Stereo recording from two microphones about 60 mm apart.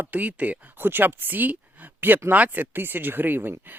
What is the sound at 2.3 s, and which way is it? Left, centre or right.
Speech, right.